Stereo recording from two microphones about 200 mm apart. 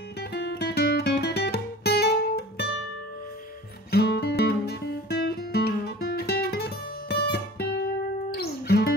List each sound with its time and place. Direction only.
0.3 s music: 55° left (ahead or behind)
3.9 s music: 55° left (ahead or behind)